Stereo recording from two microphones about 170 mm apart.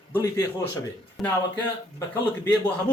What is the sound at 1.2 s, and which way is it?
Speech, centre (ahead or behind).